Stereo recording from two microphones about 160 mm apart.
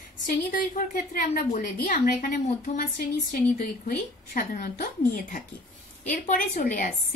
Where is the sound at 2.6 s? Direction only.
55° left (ahead or behind).